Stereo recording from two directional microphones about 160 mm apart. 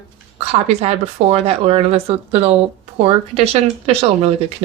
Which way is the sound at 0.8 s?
40° right (ahead or behind).